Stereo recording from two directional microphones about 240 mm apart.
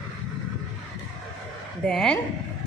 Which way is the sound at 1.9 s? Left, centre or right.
Centre.